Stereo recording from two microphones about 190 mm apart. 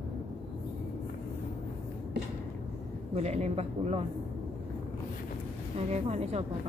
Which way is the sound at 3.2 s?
35° right (ahead or behind).